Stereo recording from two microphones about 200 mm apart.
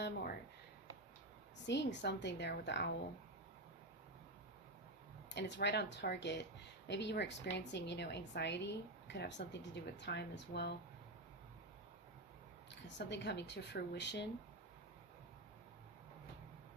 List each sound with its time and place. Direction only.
0.0 s a sound: 50° left (ahead or behind)
1.6 s a woman's voice: 60° left (ahead or behind)
5.3 s a woman's voice: 60° left (ahead or behind)
13.0 s a woman's voice: 60° left (ahead or behind)